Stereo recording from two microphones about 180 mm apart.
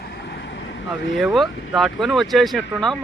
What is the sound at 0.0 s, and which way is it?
Vehicle, 65° left (ahead or behind).